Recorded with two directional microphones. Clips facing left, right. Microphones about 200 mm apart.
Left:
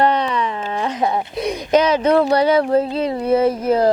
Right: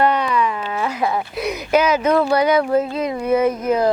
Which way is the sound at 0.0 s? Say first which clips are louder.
Even; 30° left (ahead or behind).